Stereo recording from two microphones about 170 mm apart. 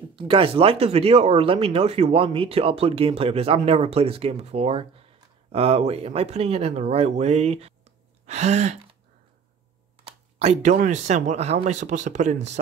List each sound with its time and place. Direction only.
0.1 s speech: 30° right (ahead or behind)
10.0 s speech: 40° right (ahead or behind)